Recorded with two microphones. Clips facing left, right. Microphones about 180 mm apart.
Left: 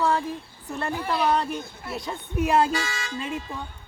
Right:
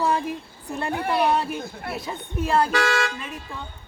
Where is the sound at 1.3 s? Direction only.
5° right (ahead or behind).